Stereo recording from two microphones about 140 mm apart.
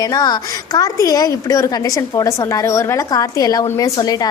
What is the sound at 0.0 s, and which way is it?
A woman's voice, 30° left (ahead or behind).